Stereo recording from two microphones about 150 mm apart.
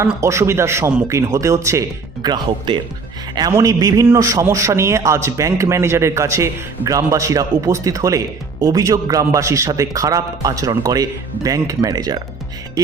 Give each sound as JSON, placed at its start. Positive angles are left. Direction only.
{"t": 0.2, "sound": "a man's voice", "side_deg": -20}
{"t": 2.2, "sound": "a man's voice", "side_deg": -30}